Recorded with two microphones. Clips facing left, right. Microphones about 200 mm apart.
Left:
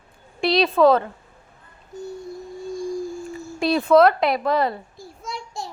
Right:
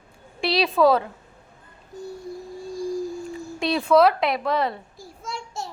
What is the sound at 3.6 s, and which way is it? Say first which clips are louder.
A woman's voice: left 2 dB; centre (ahead or behind).